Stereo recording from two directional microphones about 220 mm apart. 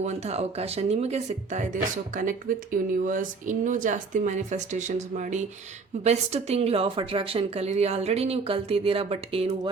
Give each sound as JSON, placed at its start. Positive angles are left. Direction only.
{"t": 0.0, "sound": "a woman's voice", "side_deg": -30}